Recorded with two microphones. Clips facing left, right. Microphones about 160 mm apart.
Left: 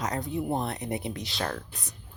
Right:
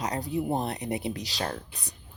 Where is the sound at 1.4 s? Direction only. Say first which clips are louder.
Even; 35° right (ahead or behind).